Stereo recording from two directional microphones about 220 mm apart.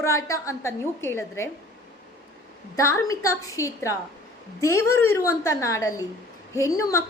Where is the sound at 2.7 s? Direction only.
15° left (ahead or behind).